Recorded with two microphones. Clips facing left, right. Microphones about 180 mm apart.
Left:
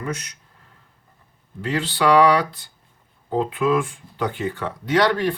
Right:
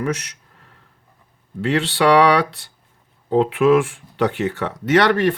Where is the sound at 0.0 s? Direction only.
75° right (ahead or behind).